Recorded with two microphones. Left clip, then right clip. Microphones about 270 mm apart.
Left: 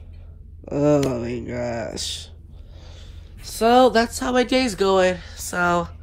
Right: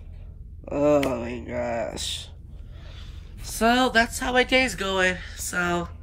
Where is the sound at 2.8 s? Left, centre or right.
Centre.